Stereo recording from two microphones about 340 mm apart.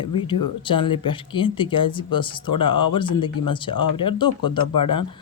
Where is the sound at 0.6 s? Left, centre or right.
Centre.